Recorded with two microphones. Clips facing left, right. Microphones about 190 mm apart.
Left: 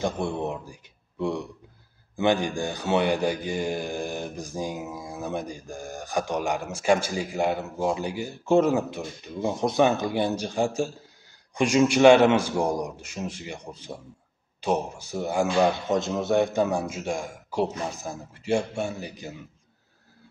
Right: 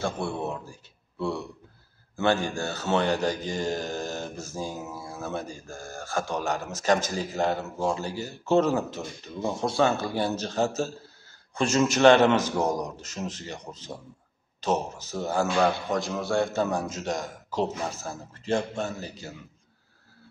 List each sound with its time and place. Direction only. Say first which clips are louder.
0.0 s a man's voice: left 2 dB; 15° left (ahead or behind)